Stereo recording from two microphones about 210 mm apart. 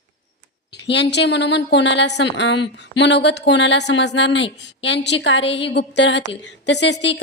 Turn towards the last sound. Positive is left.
turn(degrees=60)  # may be behind; listen again after turning